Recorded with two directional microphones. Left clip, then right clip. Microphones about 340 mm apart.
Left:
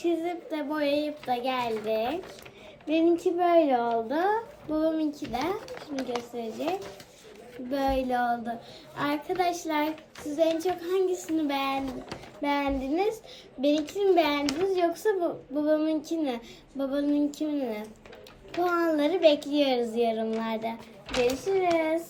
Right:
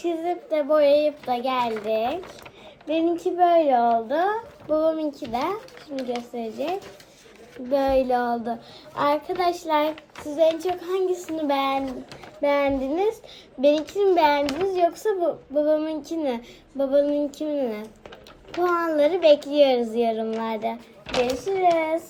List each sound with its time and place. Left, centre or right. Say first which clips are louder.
0.0 s a child's voice: right 3 dB; centre
6.3 s a child's voice: right 5 dB; centre
7.7 s a child's voice: right 7 dB; centre